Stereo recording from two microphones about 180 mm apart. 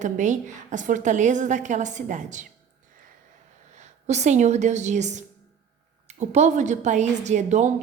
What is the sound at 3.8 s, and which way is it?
A woman's voice, 40° right (ahead or behind).